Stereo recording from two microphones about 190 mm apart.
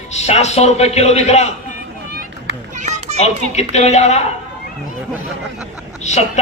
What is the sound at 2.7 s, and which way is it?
Children playing, 40° right (ahead or behind).